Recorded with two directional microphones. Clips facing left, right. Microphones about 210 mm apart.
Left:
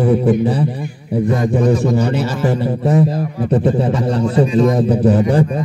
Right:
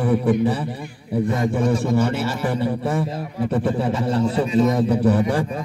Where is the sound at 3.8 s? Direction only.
20° left (ahead or behind).